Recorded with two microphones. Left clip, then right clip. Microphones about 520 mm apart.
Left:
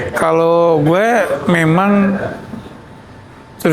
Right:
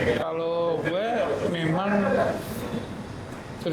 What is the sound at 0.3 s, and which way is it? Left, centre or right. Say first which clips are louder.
Speech: left 15 dB; left.